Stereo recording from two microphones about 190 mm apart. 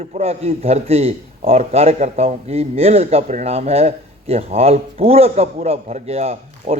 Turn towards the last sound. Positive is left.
turn(degrees=-30)  # may be behind; listen again after turning